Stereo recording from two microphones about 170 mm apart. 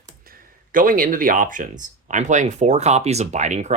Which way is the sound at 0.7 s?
55° right (ahead or behind).